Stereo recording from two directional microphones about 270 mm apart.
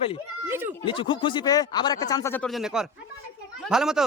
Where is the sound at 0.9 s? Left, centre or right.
Centre.